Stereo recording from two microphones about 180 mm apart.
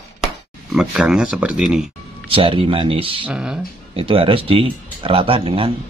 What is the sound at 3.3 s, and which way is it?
Speech, 5° right (ahead or behind).